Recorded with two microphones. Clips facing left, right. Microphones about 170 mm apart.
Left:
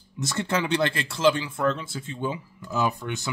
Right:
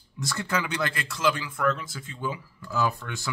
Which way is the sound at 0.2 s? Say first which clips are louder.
Left 3 dB; 25° left (ahead or behind).